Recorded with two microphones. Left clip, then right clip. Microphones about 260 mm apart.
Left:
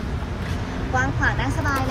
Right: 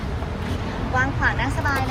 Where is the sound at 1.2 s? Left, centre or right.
Centre.